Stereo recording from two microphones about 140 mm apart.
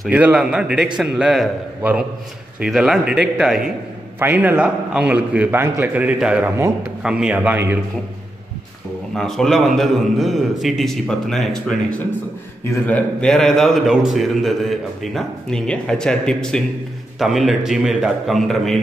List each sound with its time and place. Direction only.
0.0 s a man's voice: 10° right (ahead or behind)
9.1 s a man's voice: 5° left (ahead or behind)
12.8 s a man's voice: 10° left (ahead or behind)